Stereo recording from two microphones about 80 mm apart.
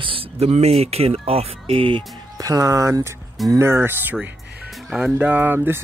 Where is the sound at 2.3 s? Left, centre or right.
Right.